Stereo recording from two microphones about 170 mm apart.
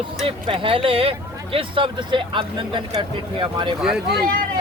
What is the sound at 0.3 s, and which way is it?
Speech, 30° right (ahead or behind).